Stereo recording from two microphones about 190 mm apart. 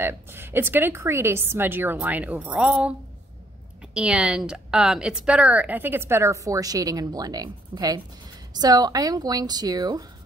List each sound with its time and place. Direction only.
0.0 s a woman's voice: 10° right (ahead or behind)